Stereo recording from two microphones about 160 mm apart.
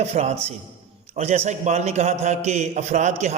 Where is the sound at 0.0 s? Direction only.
40° right (ahead or behind).